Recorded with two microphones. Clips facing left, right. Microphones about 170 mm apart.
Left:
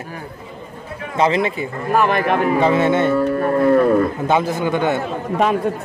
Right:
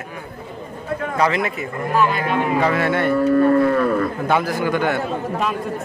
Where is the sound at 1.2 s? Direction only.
25° left (ahead or behind).